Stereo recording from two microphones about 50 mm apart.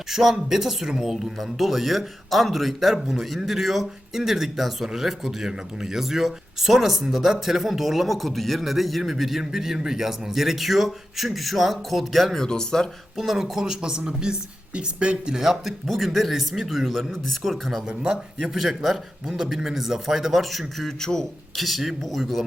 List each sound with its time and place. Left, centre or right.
0.1 s speech: centre
13.1 s speech: centre
17.8 s speech: centre
18.5 s speech: centre